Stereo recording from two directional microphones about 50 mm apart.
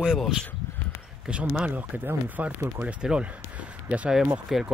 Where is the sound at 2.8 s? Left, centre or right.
Right.